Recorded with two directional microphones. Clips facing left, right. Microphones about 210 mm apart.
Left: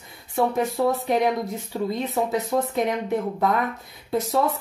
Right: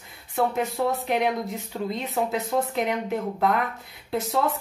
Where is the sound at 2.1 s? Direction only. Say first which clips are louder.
Left 2 dB; centre (ahead or behind).